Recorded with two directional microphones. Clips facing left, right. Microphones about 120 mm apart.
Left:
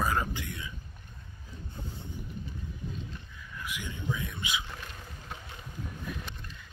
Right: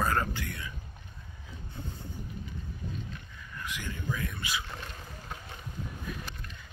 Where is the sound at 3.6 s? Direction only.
15° left (ahead or behind).